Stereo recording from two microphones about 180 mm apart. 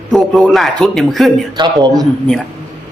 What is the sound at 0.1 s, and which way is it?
A woman's voice, centre (ahead or behind).